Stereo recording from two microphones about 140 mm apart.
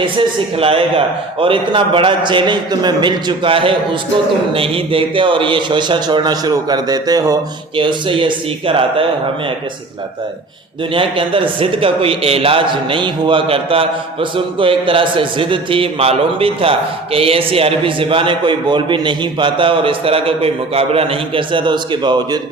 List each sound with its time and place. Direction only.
0.0 s a man's voice: 40° right (ahead or behind)
7.8 s a man's voice: 35° right (ahead or behind)
10.9 s a man's voice: 40° right (ahead or behind)